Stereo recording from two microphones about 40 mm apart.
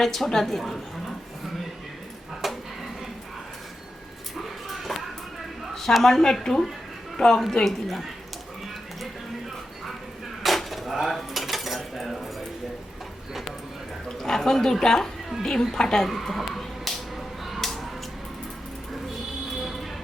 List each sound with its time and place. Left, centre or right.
0.0 s a woman's voice: centre
2.4 s a sound: centre
4.4 s dog: centre
5.7 s a woman's voice: centre
10.4 s cutlery: centre
14.2 s a woman's voice: centre
16.0 s a sound: centre